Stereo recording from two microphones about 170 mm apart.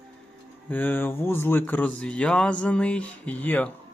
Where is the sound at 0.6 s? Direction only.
10° left (ahead or behind).